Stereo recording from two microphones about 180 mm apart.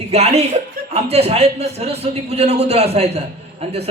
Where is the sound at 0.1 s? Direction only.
35° right (ahead or behind).